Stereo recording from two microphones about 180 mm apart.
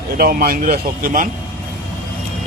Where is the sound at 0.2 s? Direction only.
55° right (ahead or behind).